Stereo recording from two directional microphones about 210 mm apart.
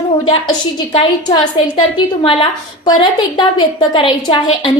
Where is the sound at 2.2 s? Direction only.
25° left (ahead or behind).